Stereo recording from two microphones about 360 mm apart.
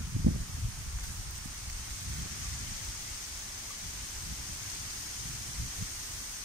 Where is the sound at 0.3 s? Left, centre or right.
Right.